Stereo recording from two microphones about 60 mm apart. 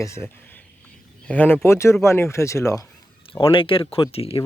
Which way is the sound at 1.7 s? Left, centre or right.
Left.